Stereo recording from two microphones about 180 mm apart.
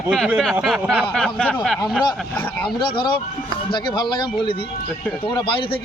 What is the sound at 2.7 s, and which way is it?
Speech, 25° left (ahead or behind).